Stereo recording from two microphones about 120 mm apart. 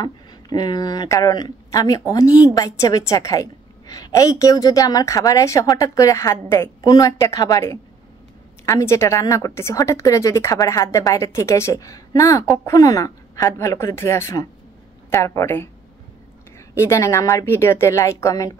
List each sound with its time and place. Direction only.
0.0 s a woman's voice: 35° left (ahead or behind)